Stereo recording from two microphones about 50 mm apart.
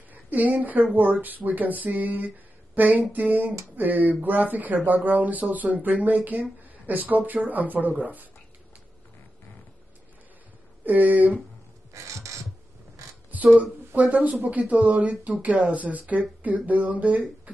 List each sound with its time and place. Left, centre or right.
0.1 s a woman's voice: right
10.9 s speech: right
11.9 s a sound: right
13.6 s speech: right